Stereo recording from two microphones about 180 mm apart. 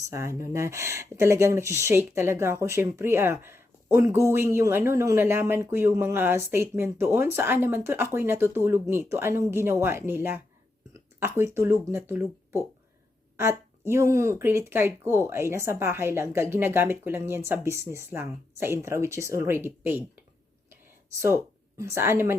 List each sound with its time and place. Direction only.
0.1 s speech: 15° right (ahead or behind)
21.2 s a sound: 15° right (ahead or behind)
21.9 s speech: 15° right (ahead or behind)